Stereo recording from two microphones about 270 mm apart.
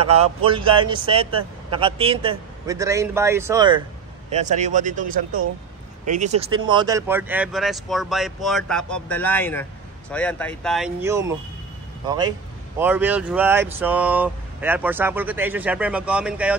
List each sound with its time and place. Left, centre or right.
0.0 s a man's voice: right
4.3 s a man's voice: right
6.0 s speech: right; by 16.5 s centre